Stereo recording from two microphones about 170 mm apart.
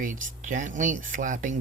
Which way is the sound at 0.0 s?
50° right (ahead or behind).